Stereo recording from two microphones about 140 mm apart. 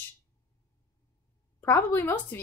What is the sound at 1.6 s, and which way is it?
Speech, 15° left (ahead or behind).